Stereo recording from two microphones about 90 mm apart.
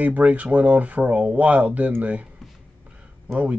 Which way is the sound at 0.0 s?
15° right (ahead or behind).